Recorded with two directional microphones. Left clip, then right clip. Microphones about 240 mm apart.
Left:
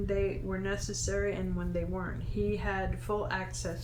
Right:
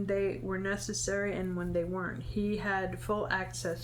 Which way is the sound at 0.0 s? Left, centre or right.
Right.